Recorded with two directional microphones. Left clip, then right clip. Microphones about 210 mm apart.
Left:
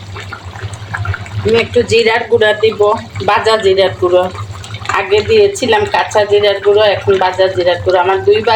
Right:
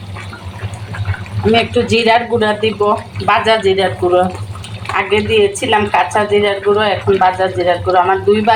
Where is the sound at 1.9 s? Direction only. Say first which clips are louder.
Left 1 dB; 15° left (ahead or behind).